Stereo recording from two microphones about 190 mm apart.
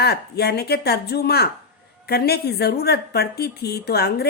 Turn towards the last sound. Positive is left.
turn(degrees=60)  # may be behind; listen again after turning